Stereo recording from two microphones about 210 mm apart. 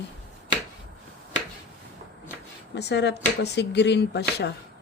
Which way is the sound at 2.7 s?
55° left (ahead or behind).